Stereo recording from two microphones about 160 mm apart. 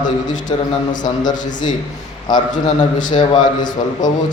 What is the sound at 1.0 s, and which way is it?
A man's voice, 25° left (ahead or behind).